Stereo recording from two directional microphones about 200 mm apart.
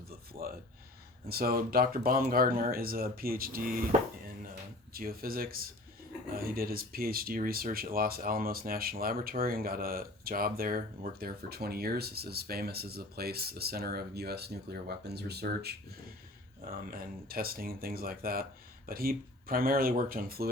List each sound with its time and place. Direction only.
0.1 s a sound: 50° right (ahead or behind)
1.3 s speech: 50° right (ahead or behind)
4.9 s speech: 45° right (ahead or behind)